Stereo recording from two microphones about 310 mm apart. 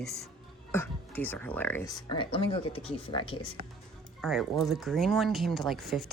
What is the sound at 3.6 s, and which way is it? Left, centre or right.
Speech, right.